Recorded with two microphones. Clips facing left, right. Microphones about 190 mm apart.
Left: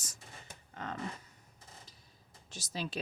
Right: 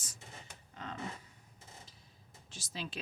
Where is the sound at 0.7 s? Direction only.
50° left (ahead or behind).